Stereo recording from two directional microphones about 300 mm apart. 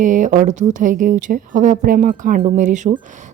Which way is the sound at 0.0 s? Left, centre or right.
Right.